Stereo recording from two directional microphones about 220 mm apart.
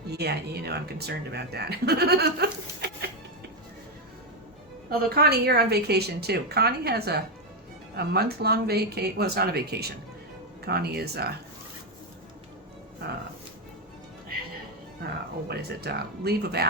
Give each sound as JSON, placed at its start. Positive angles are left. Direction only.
{"t": 0.1, "sound": "speech", "side_deg": -45}
{"t": 4.9, "sound": "speech", "side_deg": -45}
{"t": 15.4, "sound": "speech", "side_deg": -45}